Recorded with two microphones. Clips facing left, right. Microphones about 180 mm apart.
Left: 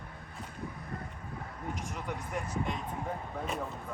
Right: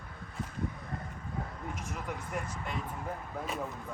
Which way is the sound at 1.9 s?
Centre (ahead or behind).